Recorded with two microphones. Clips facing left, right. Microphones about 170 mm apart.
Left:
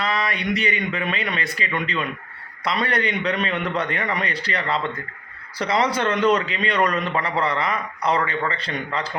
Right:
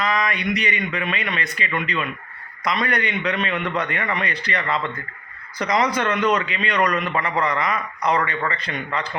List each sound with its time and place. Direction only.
0.0 s a man's voice: 35° left (ahead or behind)
2.8 s a man's voice: 35° left (ahead or behind)